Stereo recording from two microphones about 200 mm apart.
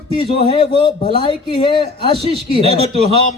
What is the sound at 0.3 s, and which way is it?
Speech, 30° left (ahead or behind).